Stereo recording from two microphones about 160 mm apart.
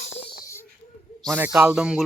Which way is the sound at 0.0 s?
40° left (ahead or behind).